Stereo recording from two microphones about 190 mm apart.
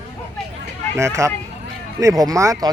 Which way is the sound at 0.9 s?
15° right (ahead or behind).